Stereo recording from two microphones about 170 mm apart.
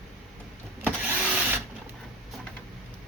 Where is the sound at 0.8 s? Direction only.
10° right (ahead or behind).